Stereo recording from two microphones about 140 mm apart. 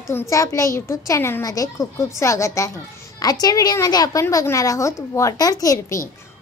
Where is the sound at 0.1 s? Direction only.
20° left (ahead or behind).